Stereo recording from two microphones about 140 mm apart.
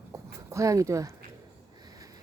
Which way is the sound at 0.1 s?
25° right (ahead or behind).